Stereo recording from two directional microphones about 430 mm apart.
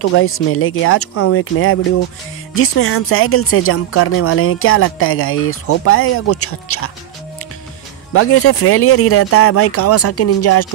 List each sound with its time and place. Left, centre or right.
0.0 s speech: left
8.1 s speech: left